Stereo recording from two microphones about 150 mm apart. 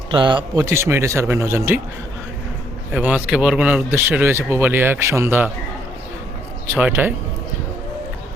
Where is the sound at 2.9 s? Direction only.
10° right (ahead or behind).